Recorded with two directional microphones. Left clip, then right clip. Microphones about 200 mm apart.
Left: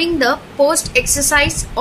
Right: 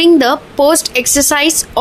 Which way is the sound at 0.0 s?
40° right (ahead or behind).